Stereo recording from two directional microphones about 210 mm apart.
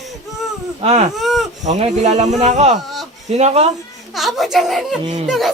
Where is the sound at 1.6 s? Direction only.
35° right (ahead or behind).